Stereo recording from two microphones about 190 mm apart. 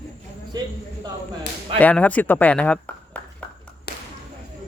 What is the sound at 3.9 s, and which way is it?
Whip, 60° left (ahead or behind).